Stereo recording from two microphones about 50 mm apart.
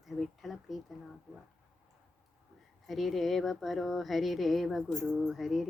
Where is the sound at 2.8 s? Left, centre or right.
Centre.